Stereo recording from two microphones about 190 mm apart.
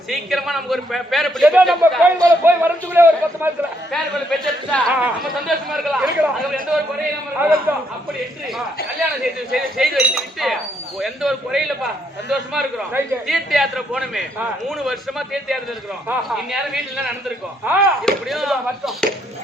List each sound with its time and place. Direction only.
0.1 s a man's voice: centre (ahead or behind)
2.4 s a man's voice: 10° right (ahead or behind)
3.9 s a man's voice: centre (ahead or behind)
8.5 s a man's voice: centre (ahead or behind)